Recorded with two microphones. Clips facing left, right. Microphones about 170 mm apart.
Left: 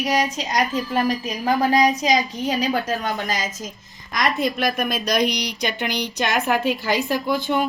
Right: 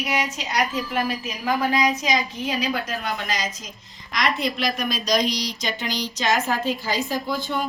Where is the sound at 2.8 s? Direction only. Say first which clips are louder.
Left 4 dB; 45° left (ahead or behind).